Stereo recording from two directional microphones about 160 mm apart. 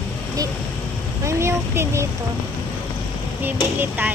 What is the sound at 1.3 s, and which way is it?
Speech, 15° right (ahead or behind).